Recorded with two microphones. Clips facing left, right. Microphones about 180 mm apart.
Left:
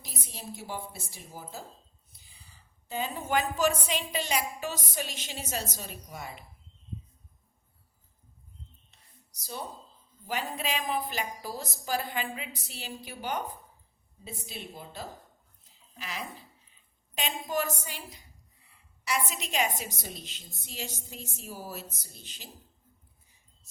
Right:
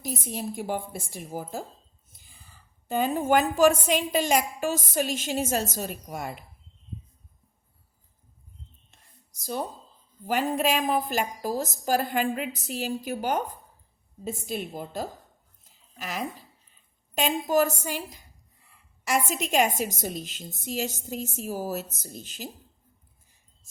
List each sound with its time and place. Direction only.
0.0 s a woman's voice: 45° right (ahead or behind)
9.4 s a woman's voice: 50° right (ahead or behind)